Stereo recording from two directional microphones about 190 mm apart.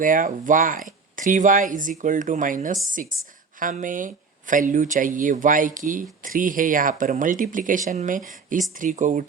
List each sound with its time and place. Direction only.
0.0 s speech: 45° right (ahead or behind)